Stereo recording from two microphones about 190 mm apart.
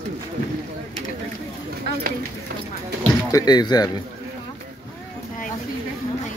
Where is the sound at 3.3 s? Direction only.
20° left (ahead or behind).